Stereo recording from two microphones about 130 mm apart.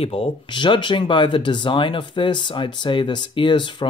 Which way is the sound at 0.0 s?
45° left (ahead or behind).